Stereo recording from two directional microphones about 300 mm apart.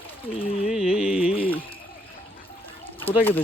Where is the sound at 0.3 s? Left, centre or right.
Centre.